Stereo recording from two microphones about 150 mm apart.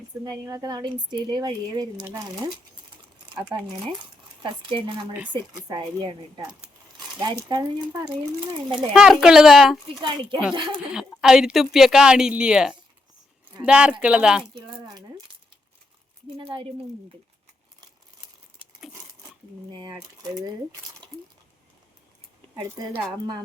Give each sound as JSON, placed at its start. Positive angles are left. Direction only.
{"t": 0.3, "sound": "speech", "side_deg": -25}
{"t": 4.4, "sound": "a woman's voice", "side_deg": -35}
{"t": 8.7, "sound": "speech", "side_deg": -5}
{"t": 10.0, "sound": "a woman's voice", "side_deg": -30}
{"t": 10.9, "sound": "speech", "side_deg": -5}
{"t": 16.4, "sound": "a woman's voice", "side_deg": -40}
{"t": 19.7, "sound": "speech", "side_deg": -25}
{"t": 22.7, "sound": "speech", "side_deg": -25}